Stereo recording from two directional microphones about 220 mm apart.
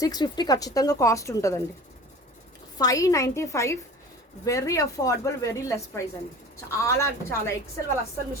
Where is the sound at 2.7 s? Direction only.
15° left (ahead or behind).